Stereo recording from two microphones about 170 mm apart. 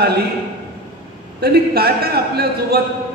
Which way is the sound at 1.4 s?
65° right (ahead or behind).